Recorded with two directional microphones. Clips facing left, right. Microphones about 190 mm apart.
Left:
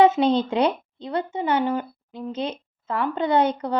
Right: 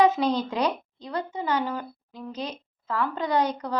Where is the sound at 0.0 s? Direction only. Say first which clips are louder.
Left 4 dB; 25° left (ahead or behind).